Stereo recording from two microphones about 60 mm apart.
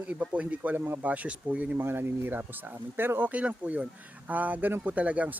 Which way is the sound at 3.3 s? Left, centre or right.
Right.